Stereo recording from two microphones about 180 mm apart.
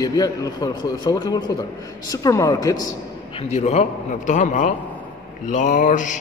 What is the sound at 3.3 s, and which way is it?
A man's voice, 35° left (ahead or behind).